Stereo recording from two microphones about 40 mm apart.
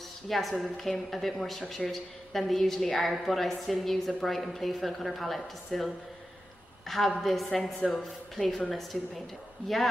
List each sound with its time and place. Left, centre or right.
0.3 s a woman's voice: centre
6.9 s a woman's voice: centre